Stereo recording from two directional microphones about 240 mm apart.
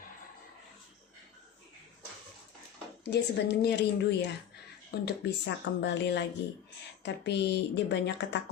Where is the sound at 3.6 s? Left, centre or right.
Left.